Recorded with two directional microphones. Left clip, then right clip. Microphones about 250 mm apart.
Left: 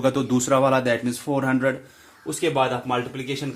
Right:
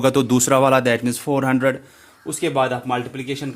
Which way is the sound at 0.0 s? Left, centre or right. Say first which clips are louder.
Right 5 dB; right.